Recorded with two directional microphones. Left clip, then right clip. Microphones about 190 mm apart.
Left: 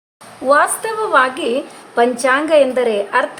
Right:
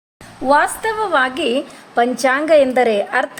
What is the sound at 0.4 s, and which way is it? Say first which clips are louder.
A woman's voice: left 1 dB; 15° right (ahead or behind).